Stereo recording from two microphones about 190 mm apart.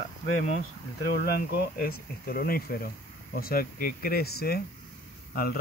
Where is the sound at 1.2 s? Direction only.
55° left (ahead or behind).